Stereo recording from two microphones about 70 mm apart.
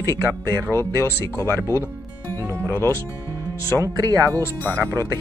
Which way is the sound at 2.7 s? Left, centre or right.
Left.